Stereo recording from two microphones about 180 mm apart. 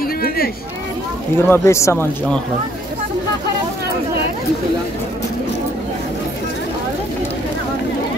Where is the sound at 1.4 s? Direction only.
15° left (ahead or behind).